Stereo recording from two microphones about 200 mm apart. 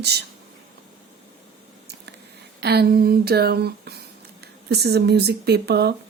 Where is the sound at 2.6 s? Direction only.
55° right (ahead or behind).